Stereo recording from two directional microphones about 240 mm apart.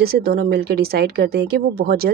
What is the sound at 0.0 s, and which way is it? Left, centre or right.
Speech, right.